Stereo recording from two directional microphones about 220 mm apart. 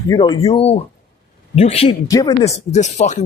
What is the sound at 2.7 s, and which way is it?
Speech, 30° left (ahead or behind).